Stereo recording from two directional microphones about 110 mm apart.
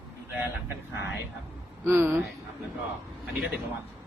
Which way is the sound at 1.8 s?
20° right (ahead or behind).